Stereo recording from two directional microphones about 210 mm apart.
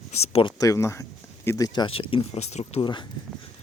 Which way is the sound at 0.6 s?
15° left (ahead or behind).